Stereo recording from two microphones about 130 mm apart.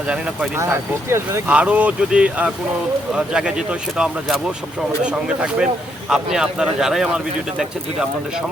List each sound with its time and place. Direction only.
0.5 s speech: 20° right (ahead or behind)